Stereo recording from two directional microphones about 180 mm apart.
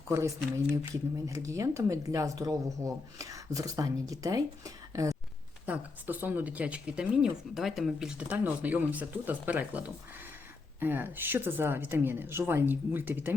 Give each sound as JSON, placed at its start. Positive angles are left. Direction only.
{"t": 0.1, "sound": "speech", "side_deg": -15}